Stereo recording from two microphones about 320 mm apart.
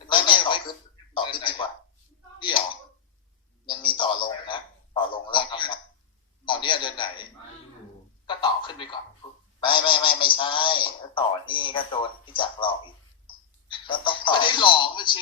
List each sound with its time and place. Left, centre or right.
0.1 s telephone: centre
1.1 s a man's voice: centre
3.7 s a man's voice: centre
4.3 s a sound: centre
6.4 s a man's voice: centre
8.3 s speech: centre